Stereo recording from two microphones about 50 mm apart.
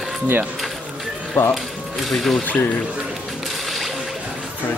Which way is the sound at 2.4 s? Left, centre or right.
Left.